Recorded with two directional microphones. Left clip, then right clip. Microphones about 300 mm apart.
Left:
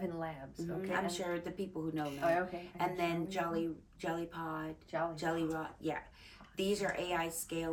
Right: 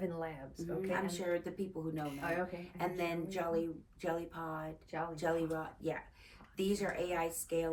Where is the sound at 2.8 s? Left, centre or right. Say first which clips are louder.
Left 2 dB; centre.